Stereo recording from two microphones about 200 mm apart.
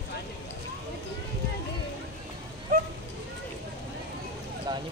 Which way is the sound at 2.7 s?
45° right (ahead or behind).